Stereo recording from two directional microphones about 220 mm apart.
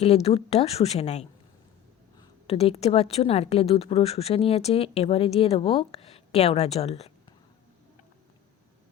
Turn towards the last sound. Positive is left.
turn(degrees=30)  # may be behind; listen again after turning